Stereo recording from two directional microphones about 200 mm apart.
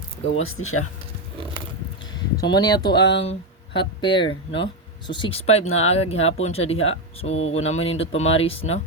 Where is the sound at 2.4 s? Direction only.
20° left (ahead or behind).